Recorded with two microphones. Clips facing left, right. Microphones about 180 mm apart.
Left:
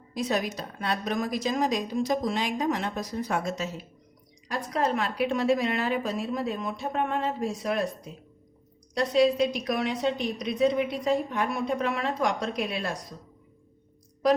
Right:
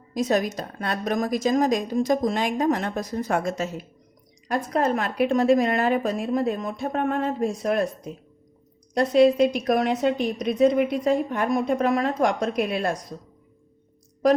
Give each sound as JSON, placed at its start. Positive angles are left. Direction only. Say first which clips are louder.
{"t": 0.1, "sound": "a woman's voice", "louder": "right 5 dB", "side_deg": -45}